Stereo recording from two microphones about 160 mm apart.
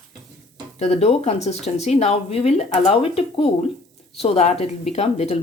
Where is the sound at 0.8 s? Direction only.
40° left (ahead or behind).